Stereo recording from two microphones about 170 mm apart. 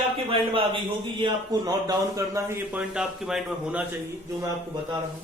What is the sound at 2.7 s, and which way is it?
A man's voice, 5° right (ahead or behind).